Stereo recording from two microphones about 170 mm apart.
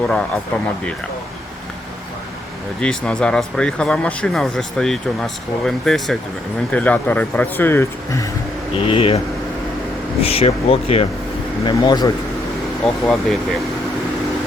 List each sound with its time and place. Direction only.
0.0 s speech: 5° left (ahead or behind)
2.8 s speech: 5° left (ahead or behind)
8.7 s speech: 35° left (ahead or behind)
12.8 s speech: centre (ahead or behind)